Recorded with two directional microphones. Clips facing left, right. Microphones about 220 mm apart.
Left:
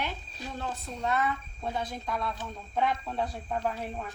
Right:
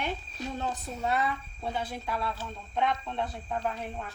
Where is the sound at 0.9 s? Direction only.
5° right (ahead or behind).